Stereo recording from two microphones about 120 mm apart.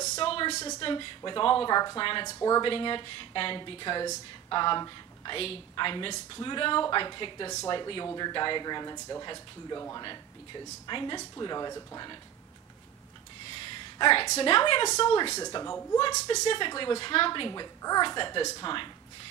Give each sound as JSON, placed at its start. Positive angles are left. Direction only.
{"t": 0.2, "sound": "a sound", "side_deg": 50}
{"t": 0.7, "sound": "speech", "side_deg": 40}
{"t": 1.8, "sound": "speech", "side_deg": 30}
{"t": 2.6, "sound": "speech", "side_deg": 45}
{"t": 5.4, "sound": "speech", "side_deg": 50}
{"t": 11.3, "sound": "speech", "side_deg": 30}
{"t": 13.7, "sound": "a sound", "side_deg": 45}
{"t": 14.3, "sound": "speech", "side_deg": 50}
{"t": 15.3, "sound": "speech", "side_deg": 30}
{"t": 16.4, "sound": "speech", "side_deg": 45}